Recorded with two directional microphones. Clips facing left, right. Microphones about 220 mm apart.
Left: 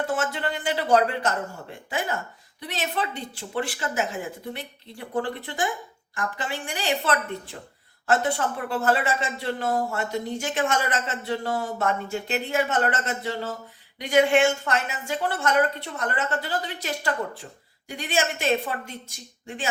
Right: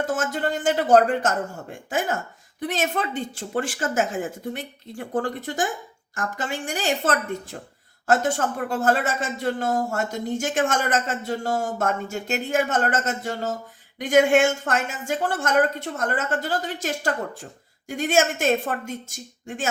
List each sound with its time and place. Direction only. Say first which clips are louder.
0.0 s speech: right 2 dB; 45° right (ahead or behind)